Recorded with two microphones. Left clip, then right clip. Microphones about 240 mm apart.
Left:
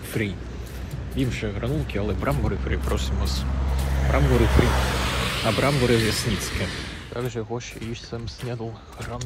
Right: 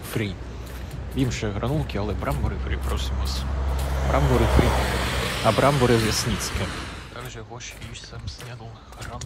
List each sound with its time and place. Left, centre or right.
0.2 s speech: centre
3.7 s vehicle: right
4.2 s speech: right
5.6 s speech: centre
7.2 s speech: centre